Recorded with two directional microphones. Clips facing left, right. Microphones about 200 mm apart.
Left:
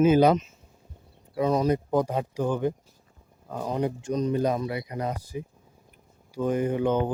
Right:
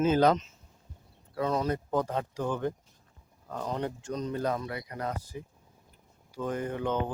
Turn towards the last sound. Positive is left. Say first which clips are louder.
# left 6 dB
turn(degrees=15)  # may be behind; listen again after turning